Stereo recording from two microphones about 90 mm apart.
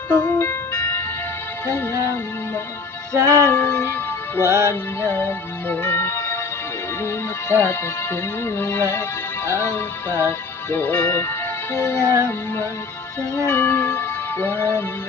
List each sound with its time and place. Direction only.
0.1 s ice cream truck: 25° left (ahead or behind)
1.6 s speech: 35° left (ahead or behind)
3.1 s music: 35° right (ahead or behind)
3.5 s music: 25° left (ahead or behind)
4.4 s music: 30° right (ahead or behind)
5.1 s music: 25° left (ahead or behind)
7.5 s music: 25° left (ahead or behind)
13.4 s music: 25° left (ahead or behind)